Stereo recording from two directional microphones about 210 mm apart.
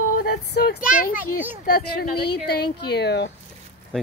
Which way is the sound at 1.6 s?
50° left (ahead or behind).